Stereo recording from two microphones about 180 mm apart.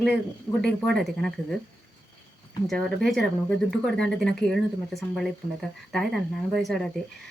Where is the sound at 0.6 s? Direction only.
5° left (ahead or behind).